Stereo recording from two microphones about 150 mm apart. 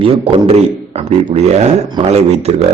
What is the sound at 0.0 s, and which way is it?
A man's voice, 40° right (ahead or behind).